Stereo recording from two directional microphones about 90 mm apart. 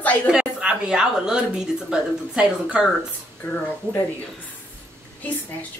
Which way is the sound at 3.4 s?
35° left (ahead or behind).